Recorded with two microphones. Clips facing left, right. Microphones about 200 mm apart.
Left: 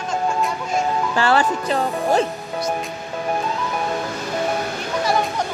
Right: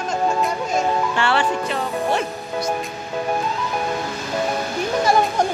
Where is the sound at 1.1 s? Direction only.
40° left (ahead or behind).